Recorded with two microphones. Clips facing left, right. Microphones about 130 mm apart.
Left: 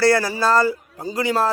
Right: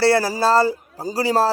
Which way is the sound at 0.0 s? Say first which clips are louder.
Right 1 dB; 30° right (ahead or behind).